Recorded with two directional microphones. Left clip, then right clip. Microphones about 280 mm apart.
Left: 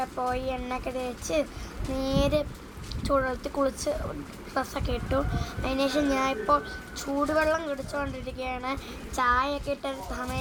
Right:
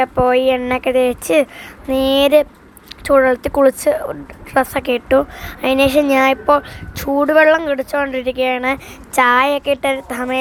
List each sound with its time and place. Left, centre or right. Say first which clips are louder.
0.0 s a woman's voice: right 16 dB; right
2.0 s a woman's voice: right 13 dB; right
3.1 s a woman's voice: right 15 dB; right
9.2 s a woman's voice: right 12 dB; right
9.6 s a woman's voice: right 15 dB; right